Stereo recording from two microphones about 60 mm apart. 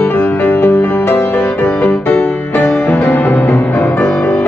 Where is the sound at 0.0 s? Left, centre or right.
Left.